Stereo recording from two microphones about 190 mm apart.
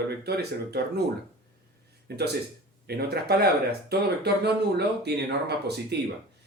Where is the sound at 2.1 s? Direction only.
60° right (ahead or behind).